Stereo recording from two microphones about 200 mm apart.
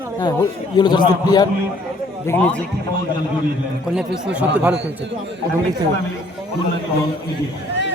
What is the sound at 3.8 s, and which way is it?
Speech, 5° right (ahead or behind).